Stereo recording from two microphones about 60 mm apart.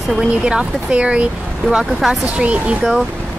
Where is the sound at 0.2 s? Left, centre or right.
Centre.